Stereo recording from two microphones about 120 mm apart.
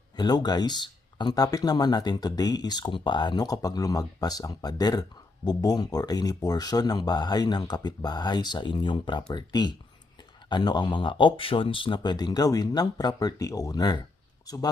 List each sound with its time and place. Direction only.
0.2 s speech: 35° left (ahead or behind)